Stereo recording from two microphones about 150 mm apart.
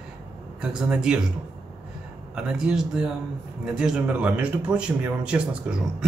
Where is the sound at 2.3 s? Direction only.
5° right (ahead or behind).